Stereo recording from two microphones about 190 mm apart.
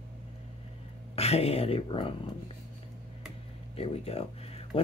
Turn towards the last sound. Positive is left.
turn(degrees=30)  # may be behind; listen again after turning